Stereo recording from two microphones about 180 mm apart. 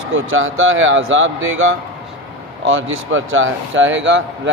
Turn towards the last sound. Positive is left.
turn(degrees=-90)